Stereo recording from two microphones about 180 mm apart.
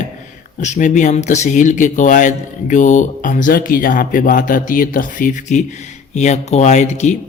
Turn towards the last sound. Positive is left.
turn(degrees=40)  # may be behind; listen again after turning